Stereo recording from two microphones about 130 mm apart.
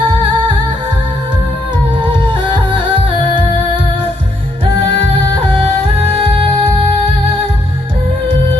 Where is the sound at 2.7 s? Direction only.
40° right (ahead or behind).